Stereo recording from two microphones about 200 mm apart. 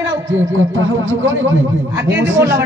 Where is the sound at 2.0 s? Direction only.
55° right (ahead or behind).